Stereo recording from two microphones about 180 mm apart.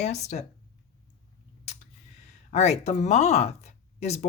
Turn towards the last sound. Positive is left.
turn(degrees=35)  # may be behind; listen again after turning